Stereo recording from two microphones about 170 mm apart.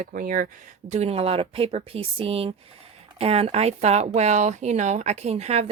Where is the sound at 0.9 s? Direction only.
40° right (ahead or behind).